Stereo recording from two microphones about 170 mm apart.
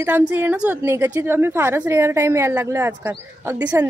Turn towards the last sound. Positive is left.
turn(degrees=-15)  # may be behind; listen again after turning